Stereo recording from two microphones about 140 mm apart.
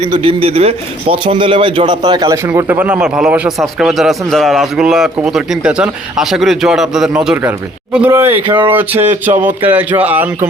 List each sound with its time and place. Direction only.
0.1 s a man's voice: 40° right (ahead or behind); by 8.4 s 15° right (ahead or behind)
8.4 s a man's voice: 35° right (ahead or behind)
8.7 s speech: 15° right (ahead or behind)